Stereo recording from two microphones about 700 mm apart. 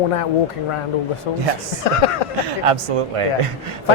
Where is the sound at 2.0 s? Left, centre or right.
Left.